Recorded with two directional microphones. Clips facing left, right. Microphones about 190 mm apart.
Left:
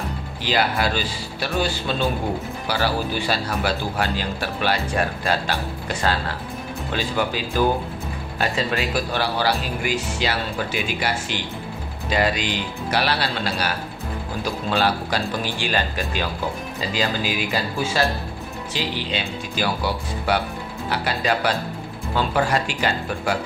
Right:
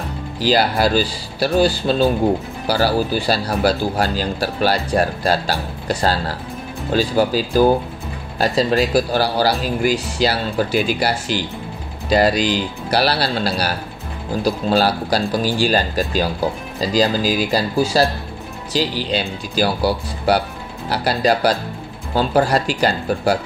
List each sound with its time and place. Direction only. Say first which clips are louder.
0.4 s a man's voice: right 6 dB; 35° right (ahead or behind)